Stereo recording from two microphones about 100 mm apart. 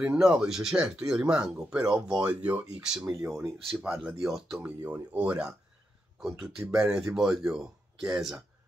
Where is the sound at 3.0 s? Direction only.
35° right (ahead or behind).